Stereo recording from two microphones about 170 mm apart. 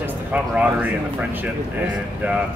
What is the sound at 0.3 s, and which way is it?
Speech, 10° right (ahead or behind).